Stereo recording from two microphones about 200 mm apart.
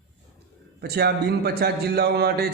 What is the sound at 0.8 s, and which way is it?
A man's voice, 55° right (ahead or behind).